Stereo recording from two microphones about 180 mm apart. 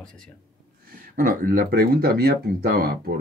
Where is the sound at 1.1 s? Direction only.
50° right (ahead or behind).